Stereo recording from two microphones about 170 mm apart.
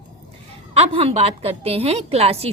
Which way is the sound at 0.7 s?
35° right (ahead or behind).